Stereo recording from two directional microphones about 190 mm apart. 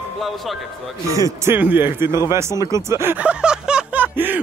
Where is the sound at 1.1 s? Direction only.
15° right (ahead or behind).